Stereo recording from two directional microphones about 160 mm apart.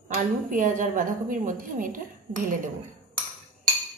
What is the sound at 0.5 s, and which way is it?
A woman's voice, 55° right (ahead or behind).